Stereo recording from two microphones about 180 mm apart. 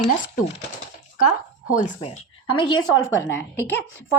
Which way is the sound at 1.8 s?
40° left (ahead or behind).